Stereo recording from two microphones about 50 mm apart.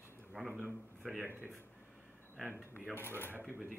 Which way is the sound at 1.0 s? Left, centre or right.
Centre.